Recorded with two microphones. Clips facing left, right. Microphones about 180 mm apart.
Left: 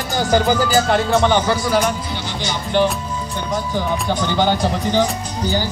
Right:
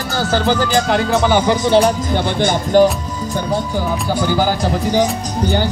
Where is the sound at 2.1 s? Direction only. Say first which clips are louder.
Right 9 dB; 50° right (ahead or behind).